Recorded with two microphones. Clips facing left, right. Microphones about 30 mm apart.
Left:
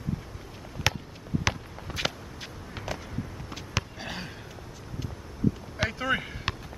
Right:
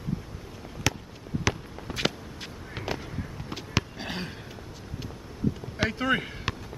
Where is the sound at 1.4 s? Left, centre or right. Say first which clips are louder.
Right 1 dB; centre.